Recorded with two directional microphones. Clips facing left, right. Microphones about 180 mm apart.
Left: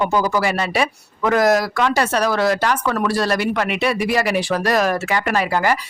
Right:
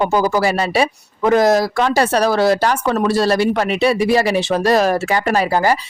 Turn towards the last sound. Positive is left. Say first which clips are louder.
# right 3 dB
turn(degrees=-35)  # may be behind; listen again after turning